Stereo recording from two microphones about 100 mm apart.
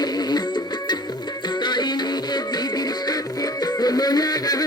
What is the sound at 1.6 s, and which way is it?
Music, 45° left (ahead or behind).